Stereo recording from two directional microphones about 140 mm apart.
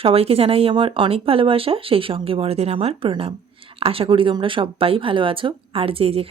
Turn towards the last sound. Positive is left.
turn(degrees=-45)  # may be behind; listen again after turning